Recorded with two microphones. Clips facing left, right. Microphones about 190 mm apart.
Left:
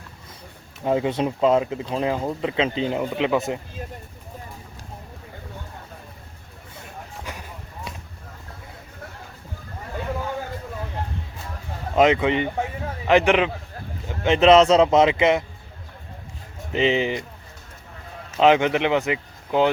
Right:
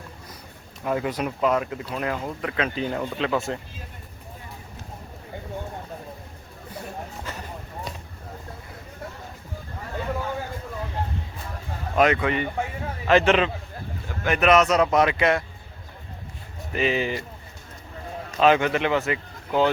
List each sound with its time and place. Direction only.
0.9 s speech: 25° left (ahead or behind)
7.3 s a sound: 15° left (ahead or behind)
11.9 s a man's voice: 20° left (ahead or behind)
14.3 s speech: 25° left (ahead or behind)
16.7 s speech: 20° left (ahead or behind)
18.3 s speech: 20° left (ahead or behind)